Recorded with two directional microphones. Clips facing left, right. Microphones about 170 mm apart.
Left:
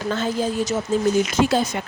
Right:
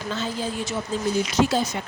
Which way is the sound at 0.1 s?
45° left (ahead or behind).